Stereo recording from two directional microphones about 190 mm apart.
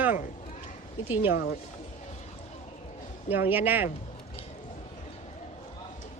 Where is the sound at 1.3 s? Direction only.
50° left (ahead or behind).